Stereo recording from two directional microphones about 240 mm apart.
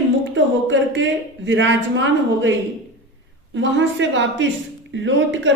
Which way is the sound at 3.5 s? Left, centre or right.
Right.